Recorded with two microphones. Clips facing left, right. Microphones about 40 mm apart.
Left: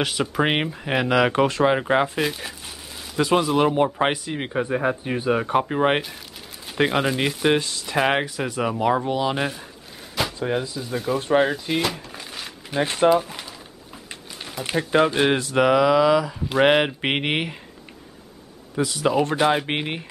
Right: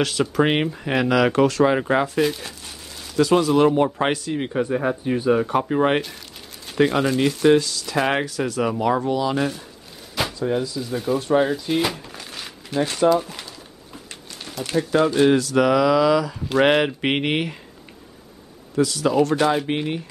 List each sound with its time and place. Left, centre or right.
0.0 s speech: centre
7.8 s speech: centre
10.8 s speech: centre
11.1 s speech: left
11.4 s speech: centre
11.8 s speech: centre
12.1 s a sound: centre
12.6 s speech: left
14.4 s speech: left
18.8 s speech: centre
19.6 s speech: left